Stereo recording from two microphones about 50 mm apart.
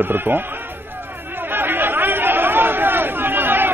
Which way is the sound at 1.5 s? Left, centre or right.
Right.